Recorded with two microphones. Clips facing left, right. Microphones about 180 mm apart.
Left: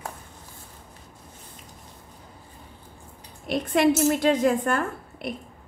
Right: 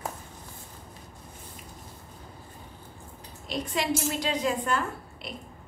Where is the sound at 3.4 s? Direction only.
55° left (ahead or behind).